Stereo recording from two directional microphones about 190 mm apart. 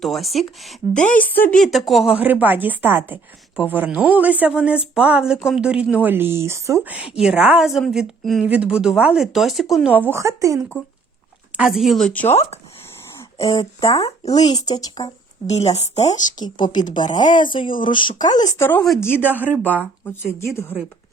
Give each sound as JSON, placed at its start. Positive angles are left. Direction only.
{"t": 0.0, "sound": "speech", "side_deg": 0}
{"t": 0.9, "sound": "speech", "side_deg": 40}
{"t": 1.2, "sound": "speech", "side_deg": 10}
{"t": 10.1, "sound": "speech", "side_deg": -15}
{"t": 11.5, "sound": "speech", "side_deg": 0}
{"t": 13.3, "sound": "speech", "side_deg": 30}
{"t": 13.7, "sound": "speech", "side_deg": 20}
{"t": 15.4, "sound": "speech", "side_deg": 35}
{"t": 16.4, "sound": "speech", "side_deg": 20}
{"t": 17.2, "sound": "speech", "side_deg": 45}
{"t": 17.5, "sound": "speech", "side_deg": 25}
{"t": 19.5, "sound": "speech", "side_deg": -10}